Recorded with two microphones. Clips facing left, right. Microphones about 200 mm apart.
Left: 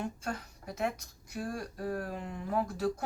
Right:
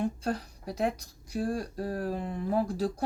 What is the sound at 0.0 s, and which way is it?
Speech, 35° right (ahead or behind).